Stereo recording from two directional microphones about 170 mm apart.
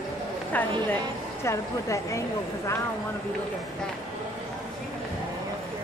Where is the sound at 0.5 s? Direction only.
10° left (ahead or behind).